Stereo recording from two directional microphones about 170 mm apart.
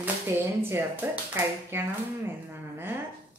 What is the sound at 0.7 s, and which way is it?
A woman's voice, 15° right (ahead or behind).